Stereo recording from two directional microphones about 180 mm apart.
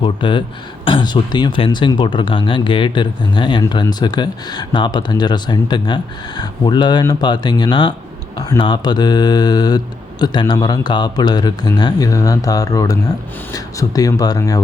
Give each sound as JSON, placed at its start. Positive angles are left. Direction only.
{"t": 0.0, "sound": "speech", "side_deg": 25}